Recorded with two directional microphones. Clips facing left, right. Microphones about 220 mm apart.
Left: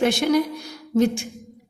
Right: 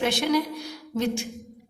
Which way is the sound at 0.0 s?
45° left (ahead or behind).